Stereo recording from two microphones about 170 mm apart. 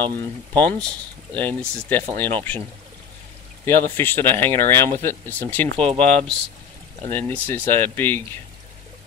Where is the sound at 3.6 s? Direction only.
10° left (ahead or behind).